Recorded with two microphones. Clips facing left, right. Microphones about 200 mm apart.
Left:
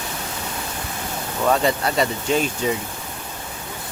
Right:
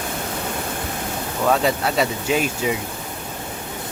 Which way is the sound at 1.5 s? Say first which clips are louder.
Even; centre (ahead or behind).